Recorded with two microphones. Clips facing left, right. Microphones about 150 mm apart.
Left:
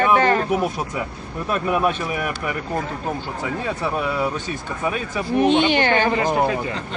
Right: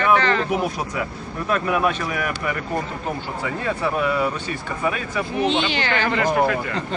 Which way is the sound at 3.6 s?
5° left (ahead or behind).